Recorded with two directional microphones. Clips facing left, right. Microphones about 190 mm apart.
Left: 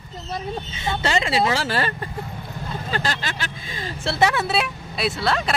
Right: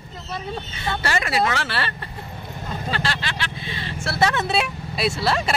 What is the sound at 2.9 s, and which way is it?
Vehicle, 45° left (ahead or behind).